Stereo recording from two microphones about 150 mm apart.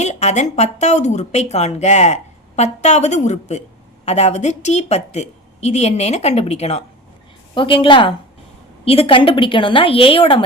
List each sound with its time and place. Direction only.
0.0 s a woman's voice: 50° left (ahead or behind)
7.5 s a woman's voice: 35° left (ahead or behind)